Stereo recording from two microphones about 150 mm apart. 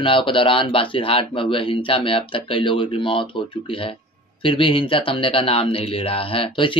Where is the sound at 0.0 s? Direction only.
35° left (ahead or behind).